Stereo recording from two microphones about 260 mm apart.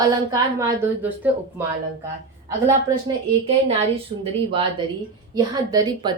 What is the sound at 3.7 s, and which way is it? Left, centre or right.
A woman's voice, right.